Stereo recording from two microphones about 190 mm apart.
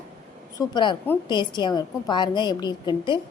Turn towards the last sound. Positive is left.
turn(degrees=25)  # may be behind; listen again after turning